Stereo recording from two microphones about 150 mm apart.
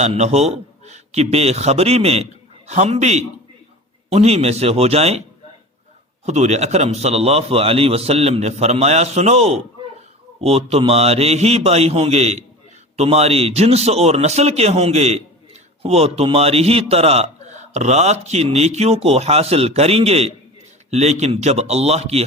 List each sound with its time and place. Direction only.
0.0 s a man's voice: 45° right (ahead or behind)
6.2 s a man's voice: 50° right (ahead or behind)